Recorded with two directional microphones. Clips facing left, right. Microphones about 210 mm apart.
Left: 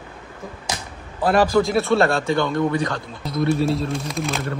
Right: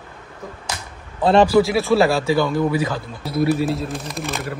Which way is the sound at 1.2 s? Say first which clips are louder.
Right 3 dB; 25° right (ahead or behind).